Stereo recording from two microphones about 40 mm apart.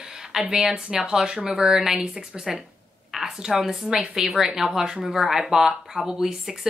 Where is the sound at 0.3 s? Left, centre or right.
Centre.